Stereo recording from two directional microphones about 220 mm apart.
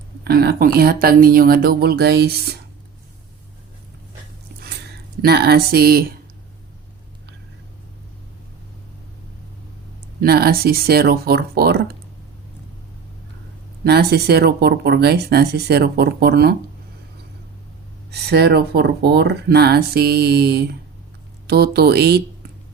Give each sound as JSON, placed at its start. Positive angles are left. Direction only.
{"t": 0.3, "sound": "speech", "side_deg": -45}
{"t": 5.2, "sound": "speech", "side_deg": -45}
{"t": 10.2, "sound": "speech", "side_deg": -45}
{"t": 13.8, "sound": "speech", "side_deg": -45}
{"t": 18.1, "sound": "speech", "side_deg": -50}